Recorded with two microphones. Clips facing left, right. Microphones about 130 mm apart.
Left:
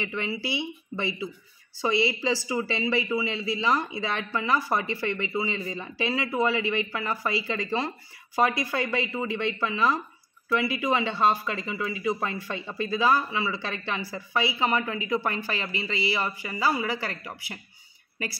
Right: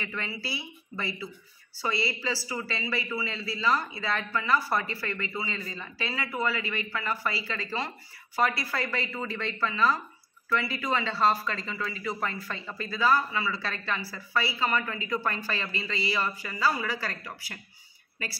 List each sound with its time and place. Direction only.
0.0 s speech: 20° left (ahead or behind)